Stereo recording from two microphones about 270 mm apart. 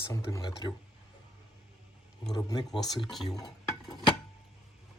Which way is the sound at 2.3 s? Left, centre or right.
Centre.